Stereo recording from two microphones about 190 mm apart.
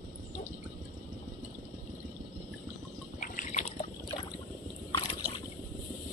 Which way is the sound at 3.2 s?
40° left (ahead or behind).